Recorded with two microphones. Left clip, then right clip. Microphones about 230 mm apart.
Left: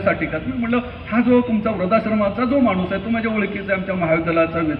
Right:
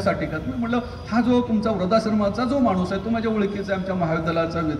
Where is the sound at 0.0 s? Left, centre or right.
Right.